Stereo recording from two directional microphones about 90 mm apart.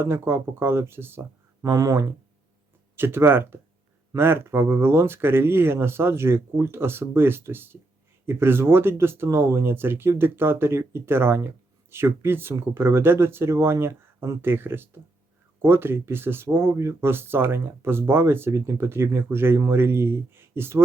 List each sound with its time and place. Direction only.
0.0 s speech: 25° right (ahead or behind)